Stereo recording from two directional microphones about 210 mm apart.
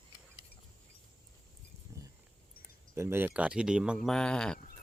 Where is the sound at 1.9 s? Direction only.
15° right (ahead or behind).